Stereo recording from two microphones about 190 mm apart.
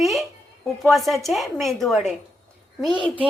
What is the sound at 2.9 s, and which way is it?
Speech, 25° right (ahead or behind).